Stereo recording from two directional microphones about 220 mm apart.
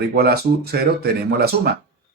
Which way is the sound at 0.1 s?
45° right (ahead or behind).